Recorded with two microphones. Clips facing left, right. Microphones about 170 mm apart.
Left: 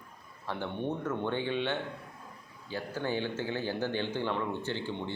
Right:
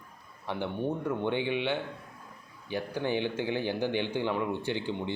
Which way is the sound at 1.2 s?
15° right (ahead or behind).